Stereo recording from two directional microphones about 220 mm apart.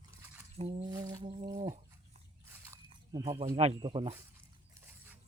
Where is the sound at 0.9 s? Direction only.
15° right (ahead or behind).